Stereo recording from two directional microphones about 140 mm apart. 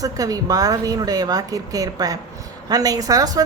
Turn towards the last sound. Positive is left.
turn(degrees=-25)  # may be behind; listen again after turning